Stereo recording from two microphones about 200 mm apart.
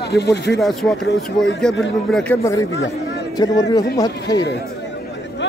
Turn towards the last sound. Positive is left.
turn(degrees=20)  # may be behind; listen again after turning